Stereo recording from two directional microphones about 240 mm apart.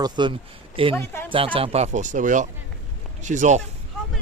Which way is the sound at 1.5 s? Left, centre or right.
Right.